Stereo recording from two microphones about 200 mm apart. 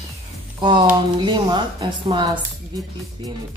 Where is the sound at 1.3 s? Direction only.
20° right (ahead or behind).